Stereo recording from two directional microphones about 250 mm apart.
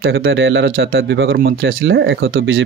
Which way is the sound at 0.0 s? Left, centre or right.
Right.